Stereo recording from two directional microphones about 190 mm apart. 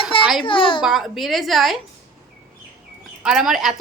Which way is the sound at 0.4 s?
25° left (ahead or behind).